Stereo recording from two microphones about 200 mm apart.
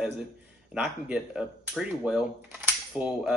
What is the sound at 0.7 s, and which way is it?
Speech, 5° right (ahead or behind).